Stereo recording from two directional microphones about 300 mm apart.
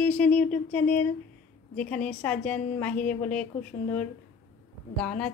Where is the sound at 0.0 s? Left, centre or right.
Centre.